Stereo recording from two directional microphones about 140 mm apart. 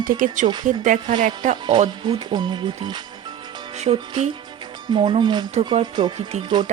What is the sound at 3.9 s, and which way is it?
Speech, 45° right (ahead or behind).